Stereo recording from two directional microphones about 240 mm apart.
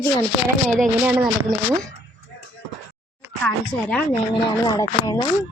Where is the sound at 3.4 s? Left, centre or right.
Centre.